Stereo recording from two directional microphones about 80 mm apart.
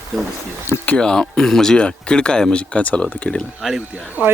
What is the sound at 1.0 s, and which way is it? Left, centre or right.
Speech, centre.